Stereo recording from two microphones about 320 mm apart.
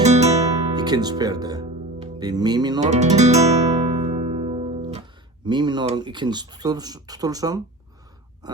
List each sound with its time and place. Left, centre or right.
0.0 s guitar: right
5.4 s speech: centre